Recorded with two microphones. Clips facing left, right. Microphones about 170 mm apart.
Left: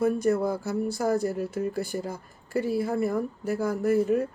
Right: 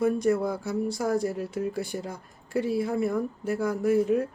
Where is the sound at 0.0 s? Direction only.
Centre (ahead or behind).